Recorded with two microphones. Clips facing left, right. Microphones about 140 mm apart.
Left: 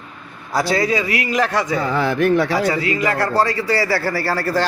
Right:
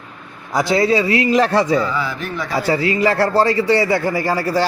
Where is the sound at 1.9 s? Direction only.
60° left (ahead or behind).